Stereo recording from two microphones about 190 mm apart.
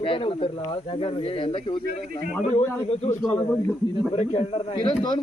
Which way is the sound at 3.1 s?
5° left (ahead or behind).